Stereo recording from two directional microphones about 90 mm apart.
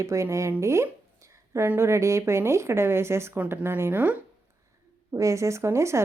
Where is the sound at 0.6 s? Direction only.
35° right (ahead or behind).